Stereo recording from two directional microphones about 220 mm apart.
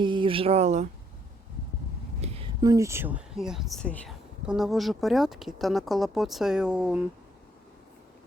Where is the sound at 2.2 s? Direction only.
25° right (ahead or behind); by 7.0 s 5° right (ahead or behind).